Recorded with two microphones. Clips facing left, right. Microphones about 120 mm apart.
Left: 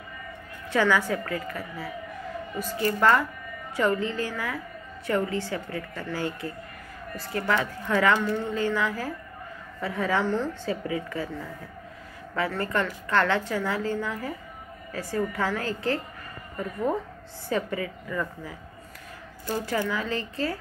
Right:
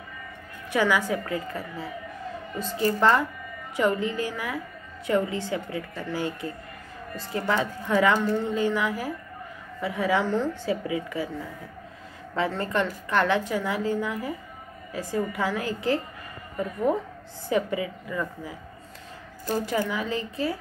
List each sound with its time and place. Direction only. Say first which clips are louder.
0.7 s a woman's voice: even; 15° right (ahead or behind)
12.4 s speech: right 1 dB; 20° right (ahead or behind)